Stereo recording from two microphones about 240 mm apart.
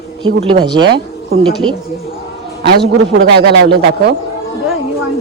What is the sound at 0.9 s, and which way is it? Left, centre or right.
Speech, right.